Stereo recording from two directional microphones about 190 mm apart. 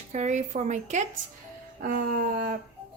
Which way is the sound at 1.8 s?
55° right (ahead or behind).